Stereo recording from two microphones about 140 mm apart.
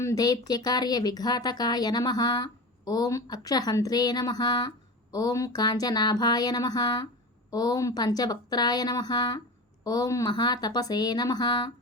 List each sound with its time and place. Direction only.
0.0 s speech: 25° left (ahead or behind)